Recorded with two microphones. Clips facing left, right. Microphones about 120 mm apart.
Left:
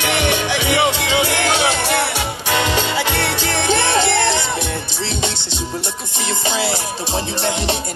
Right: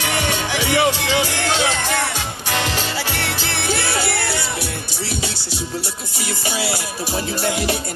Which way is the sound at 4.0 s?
25° left (ahead or behind).